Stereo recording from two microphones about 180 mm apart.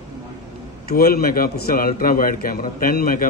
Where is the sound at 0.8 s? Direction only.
60° left (ahead or behind).